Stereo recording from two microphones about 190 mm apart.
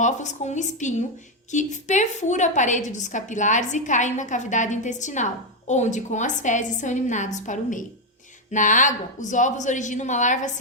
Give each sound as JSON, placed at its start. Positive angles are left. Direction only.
{"t": 0.0, "sound": "a woman's voice", "side_deg": 40}